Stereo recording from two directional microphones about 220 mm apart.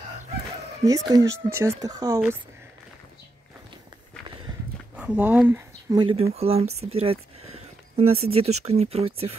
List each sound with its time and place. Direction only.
0.8 s speech: 15° right (ahead or behind)
4.9 s speech: 5° right (ahead or behind); by 9.3 s 25° right (ahead or behind)